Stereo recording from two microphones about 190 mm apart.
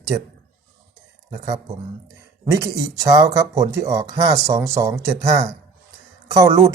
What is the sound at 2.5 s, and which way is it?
Speech, 20° right (ahead or behind).